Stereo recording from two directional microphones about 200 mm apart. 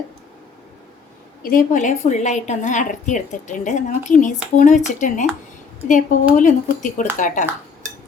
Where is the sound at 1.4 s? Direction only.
45° left (ahead or behind).